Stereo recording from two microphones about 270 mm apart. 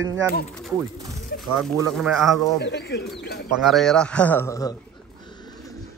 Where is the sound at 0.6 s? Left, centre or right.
Centre.